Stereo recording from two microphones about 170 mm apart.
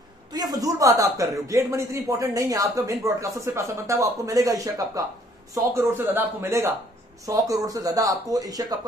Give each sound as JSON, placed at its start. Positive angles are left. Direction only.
{"t": 0.3, "sound": "speech", "side_deg": -25}